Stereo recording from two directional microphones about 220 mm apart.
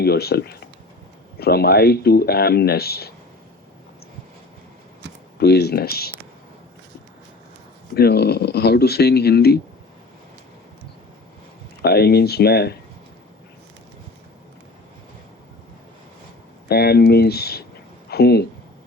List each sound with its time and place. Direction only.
0.0 s speech: 45° left (ahead or behind)
5.4 s speech: 45° left (ahead or behind)
7.9 s speech: 45° left (ahead or behind)
11.8 s speech: 45° left (ahead or behind)
16.6 s speech: 45° left (ahead or behind)